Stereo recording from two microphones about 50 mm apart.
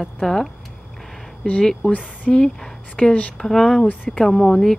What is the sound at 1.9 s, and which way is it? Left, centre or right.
Speech, left.